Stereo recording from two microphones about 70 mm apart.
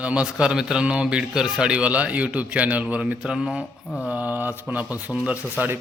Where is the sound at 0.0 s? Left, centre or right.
Centre.